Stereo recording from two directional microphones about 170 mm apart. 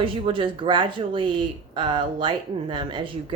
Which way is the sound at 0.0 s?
30° right (ahead or behind).